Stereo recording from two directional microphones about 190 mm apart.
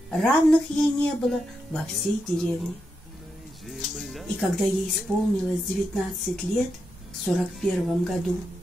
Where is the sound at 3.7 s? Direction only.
Centre (ahead or behind).